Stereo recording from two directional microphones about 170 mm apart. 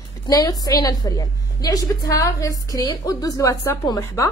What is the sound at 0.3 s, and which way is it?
A woman's voice, 20° left (ahead or behind).